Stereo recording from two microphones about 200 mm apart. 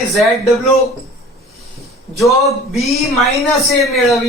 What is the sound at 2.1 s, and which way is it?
Speech, centre (ahead or behind).